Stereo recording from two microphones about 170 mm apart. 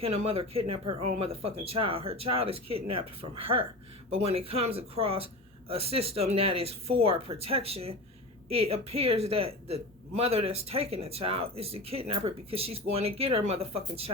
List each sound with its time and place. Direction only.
0.0 s a woman's voice: 35° right (ahead or behind)